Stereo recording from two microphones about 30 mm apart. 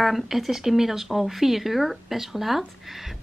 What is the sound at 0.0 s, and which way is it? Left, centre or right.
Speech, centre.